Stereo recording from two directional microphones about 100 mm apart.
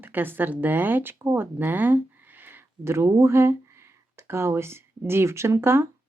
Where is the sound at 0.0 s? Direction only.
20° right (ahead or behind).